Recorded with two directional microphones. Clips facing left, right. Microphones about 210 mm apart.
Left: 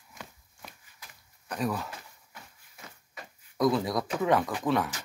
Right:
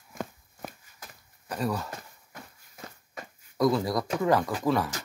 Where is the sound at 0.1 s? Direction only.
50° right (ahead or behind).